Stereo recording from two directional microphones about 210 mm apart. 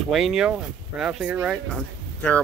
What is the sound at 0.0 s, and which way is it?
Speech, centre (ahead or behind).